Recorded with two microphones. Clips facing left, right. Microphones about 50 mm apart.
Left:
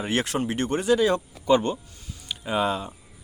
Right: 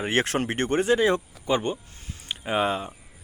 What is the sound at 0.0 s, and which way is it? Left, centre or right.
Speech, right.